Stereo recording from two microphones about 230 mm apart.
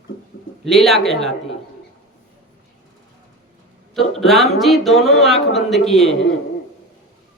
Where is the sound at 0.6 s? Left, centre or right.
Centre.